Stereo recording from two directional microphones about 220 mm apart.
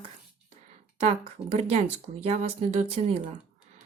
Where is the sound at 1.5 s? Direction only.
30° right (ahead or behind).